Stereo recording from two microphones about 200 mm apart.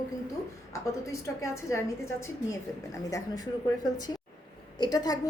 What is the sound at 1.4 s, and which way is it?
A woman's voice, 15° left (ahead or behind).